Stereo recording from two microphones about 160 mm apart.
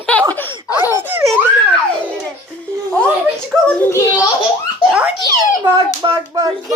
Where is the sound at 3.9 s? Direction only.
25° left (ahead or behind).